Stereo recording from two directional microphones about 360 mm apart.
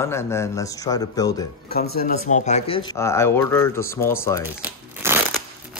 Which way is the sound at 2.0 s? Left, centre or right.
Centre.